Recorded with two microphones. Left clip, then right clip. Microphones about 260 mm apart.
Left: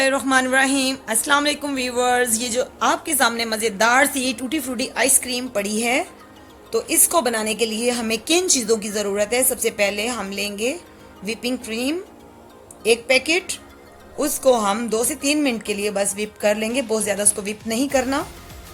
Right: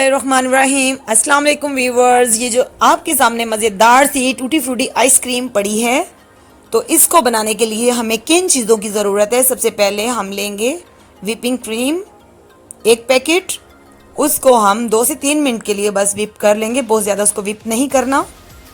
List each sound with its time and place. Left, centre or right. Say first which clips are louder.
0.0 s speech: right 5 dB; centre